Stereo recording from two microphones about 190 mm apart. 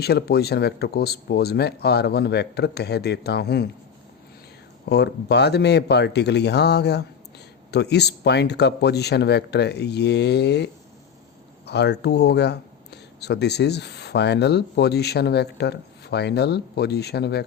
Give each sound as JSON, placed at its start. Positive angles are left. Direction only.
{"t": 0.0, "sound": "speech", "side_deg": 55}
{"t": 4.9, "sound": "speech", "side_deg": 60}